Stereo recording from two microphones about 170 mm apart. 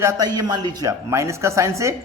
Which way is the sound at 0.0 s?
20° right (ahead or behind).